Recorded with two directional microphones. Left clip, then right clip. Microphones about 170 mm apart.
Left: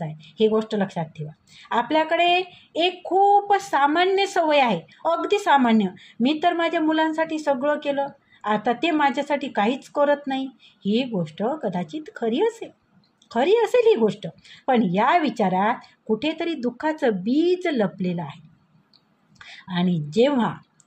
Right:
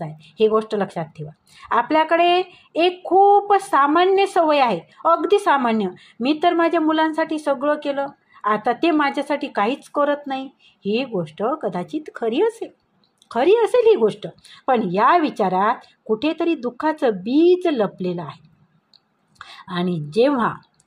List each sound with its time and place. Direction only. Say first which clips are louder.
0.0 s speech: right 3 dB; 25° right (ahead or behind)